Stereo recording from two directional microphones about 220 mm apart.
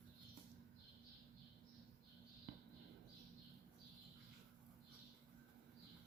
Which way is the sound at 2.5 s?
50° right (ahead or behind).